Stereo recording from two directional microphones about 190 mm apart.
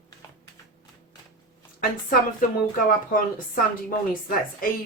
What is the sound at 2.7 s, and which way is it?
Speech, 45° left (ahead or behind).